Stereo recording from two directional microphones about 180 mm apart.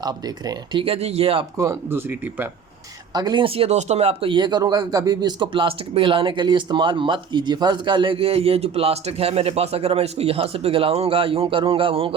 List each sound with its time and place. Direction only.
0.0 s speech: 25° right (ahead or behind)
1.5 s speech: 15° right (ahead or behind)